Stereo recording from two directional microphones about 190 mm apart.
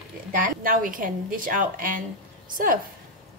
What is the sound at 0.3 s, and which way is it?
A woman's voice, 45° right (ahead or behind).